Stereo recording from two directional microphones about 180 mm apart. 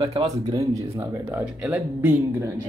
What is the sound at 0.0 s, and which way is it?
Speech, 35° right (ahead or behind).